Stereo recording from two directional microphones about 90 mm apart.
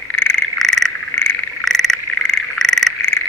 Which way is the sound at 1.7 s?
5° left (ahead or behind).